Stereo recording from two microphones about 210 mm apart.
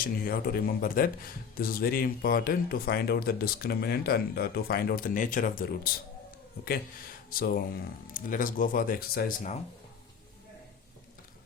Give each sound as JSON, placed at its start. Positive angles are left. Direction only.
{"t": 0.0, "sound": "speech", "side_deg": 45}
{"t": 7.3, "sound": "speech", "side_deg": 45}